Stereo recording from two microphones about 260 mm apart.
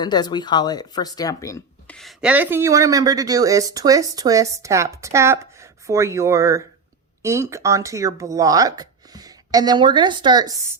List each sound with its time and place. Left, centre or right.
0.0 s speech: centre
2.0 s speech: centre